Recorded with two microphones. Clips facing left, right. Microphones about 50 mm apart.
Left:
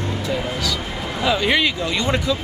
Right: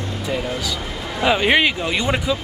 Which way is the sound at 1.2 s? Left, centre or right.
Right.